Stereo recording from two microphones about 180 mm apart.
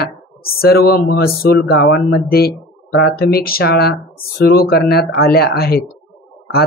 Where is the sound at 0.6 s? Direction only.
60° left (ahead or behind).